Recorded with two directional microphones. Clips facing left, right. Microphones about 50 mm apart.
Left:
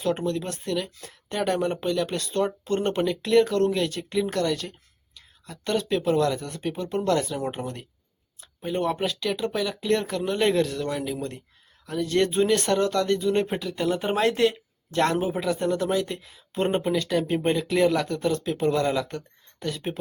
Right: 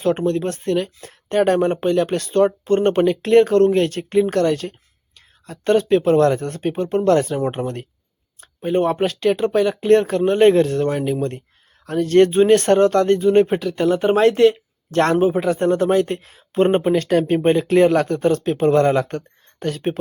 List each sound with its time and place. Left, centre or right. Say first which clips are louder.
0.0 s speech: right 7 dB; right